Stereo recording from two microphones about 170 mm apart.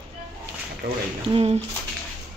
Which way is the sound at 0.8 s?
65° right (ahead or behind).